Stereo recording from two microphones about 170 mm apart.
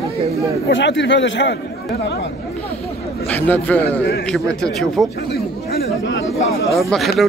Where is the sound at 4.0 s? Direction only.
75° left (ahead or behind).